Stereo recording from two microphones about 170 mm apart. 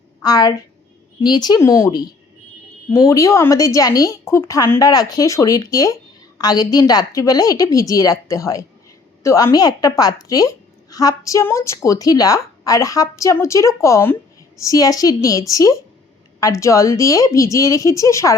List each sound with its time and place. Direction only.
0.2 s a woman's voice: 20° left (ahead or behind)